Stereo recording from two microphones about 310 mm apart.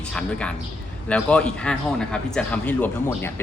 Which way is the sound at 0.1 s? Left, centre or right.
Centre.